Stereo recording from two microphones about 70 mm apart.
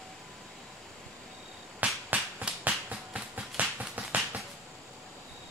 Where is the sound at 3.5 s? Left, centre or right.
Right.